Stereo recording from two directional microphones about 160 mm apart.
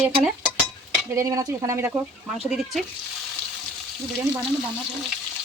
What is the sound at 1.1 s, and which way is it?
Speech, 20° right (ahead or behind).